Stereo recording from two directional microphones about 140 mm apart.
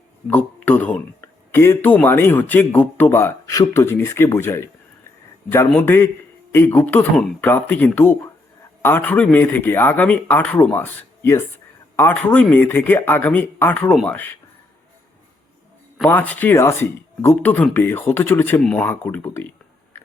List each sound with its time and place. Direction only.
0.3 s speech: 10° left (ahead or behind)
16.0 s speech: 10° left (ahead or behind)